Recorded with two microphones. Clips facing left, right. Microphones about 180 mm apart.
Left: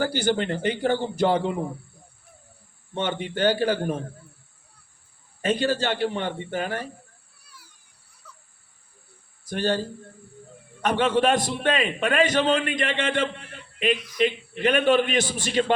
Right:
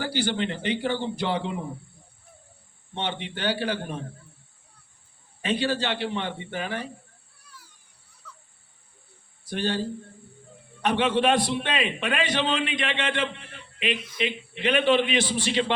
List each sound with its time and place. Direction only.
0.0 s a man's voice: 45° left (ahead or behind)
2.9 s a man's voice: 45° left (ahead or behind)
5.4 s a man's voice: 45° left (ahead or behind)
8.2 s a sound: 10° left (ahead or behind)
9.5 s a man's voice: 45° left (ahead or behind)
10.8 s a man's voice: 45° left (ahead or behind)